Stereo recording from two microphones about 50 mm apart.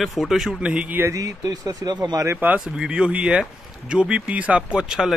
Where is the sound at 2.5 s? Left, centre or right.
Centre.